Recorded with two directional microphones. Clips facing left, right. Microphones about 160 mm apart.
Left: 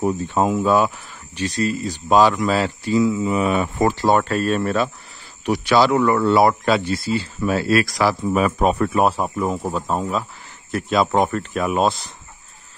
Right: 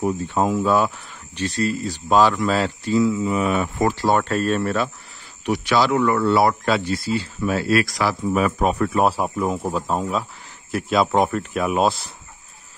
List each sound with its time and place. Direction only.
0.0 s speech: 20° left (ahead or behind)
4.2 s speech: 5° left (ahead or behind)
4.6 s speech: 20° left (ahead or behind)
5.4 s speech: 35° left (ahead or behind)
6.2 s speech: 20° left (ahead or behind); by 8.2 s 35° left (ahead or behind)
8.3 s speech: 25° left (ahead or behind)
9.0 s speech: 5° right (ahead or behind)